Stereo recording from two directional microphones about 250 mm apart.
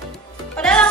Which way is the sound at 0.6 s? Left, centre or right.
Centre.